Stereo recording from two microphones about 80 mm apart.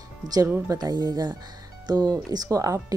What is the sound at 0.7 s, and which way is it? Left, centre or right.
Speech, right.